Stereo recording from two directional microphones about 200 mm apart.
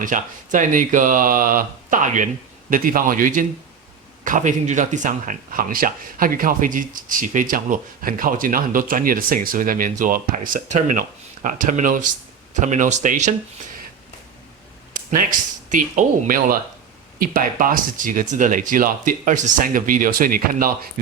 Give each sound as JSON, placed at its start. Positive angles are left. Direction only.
{"t": 0.0, "sound": "speech", "side_deg": -40}
{"t": 14.9, "sound": "speech", "side_deg": -40}